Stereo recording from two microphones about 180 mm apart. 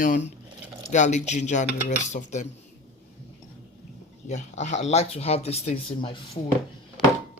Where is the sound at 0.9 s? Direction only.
40° left (ahead or behind).